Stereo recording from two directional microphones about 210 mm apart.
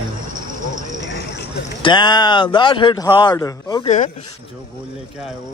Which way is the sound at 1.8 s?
20° left (ahead or behind).